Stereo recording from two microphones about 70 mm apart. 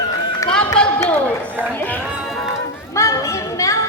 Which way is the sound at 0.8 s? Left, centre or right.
Centre.